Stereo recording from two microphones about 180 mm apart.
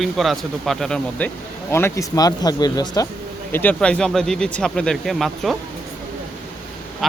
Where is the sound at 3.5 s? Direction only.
10° left (ahead or behind).